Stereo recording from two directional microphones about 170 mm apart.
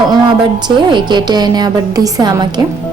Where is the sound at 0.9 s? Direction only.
25° right (ahead or behind).